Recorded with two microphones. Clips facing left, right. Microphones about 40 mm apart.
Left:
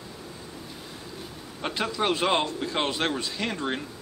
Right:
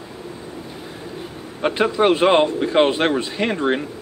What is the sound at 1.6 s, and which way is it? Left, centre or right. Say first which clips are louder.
A man's voice: right 10 dB; right.